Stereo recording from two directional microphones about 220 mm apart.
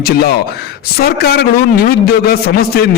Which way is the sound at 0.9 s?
45° left (ahead or behind).